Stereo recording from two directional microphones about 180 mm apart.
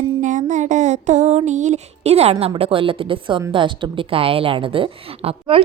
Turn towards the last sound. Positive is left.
turn(degrees=-30)  # may be behind; listen again after turning